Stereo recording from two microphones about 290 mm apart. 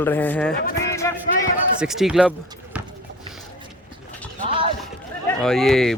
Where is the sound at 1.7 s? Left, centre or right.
Centre.